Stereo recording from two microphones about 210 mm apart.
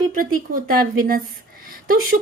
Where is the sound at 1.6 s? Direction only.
45° right (ahead or behind).